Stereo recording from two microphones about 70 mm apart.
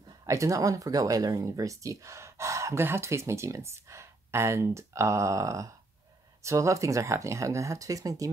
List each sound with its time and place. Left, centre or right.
0.2 s speech: right